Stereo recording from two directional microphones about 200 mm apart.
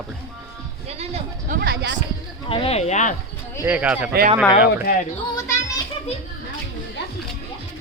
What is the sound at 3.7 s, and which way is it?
Speech, 10° right (ahead or behind).